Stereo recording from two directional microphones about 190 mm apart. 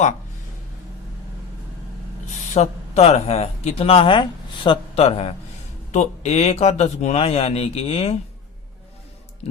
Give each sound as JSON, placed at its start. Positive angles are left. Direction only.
{"t": 2.6, "sound": "speech", "side_deg": 35}